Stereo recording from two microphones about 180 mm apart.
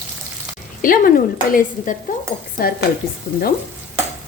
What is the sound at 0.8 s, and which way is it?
Speech, 50° left (ahead or behind).